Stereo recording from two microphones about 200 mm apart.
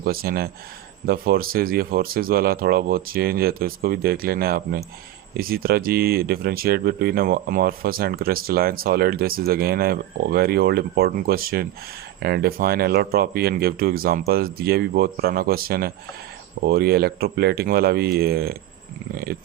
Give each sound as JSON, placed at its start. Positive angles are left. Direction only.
{"t": 0.0, "sound": "speech", "side_deg": -50}